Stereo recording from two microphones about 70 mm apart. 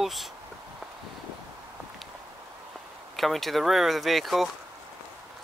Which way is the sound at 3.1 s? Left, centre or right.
Centre.